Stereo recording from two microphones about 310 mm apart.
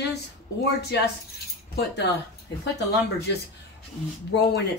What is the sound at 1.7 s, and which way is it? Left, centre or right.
Speech, left.